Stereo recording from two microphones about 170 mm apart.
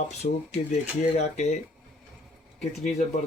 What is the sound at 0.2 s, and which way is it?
Speech, 40° left (ahead or behind).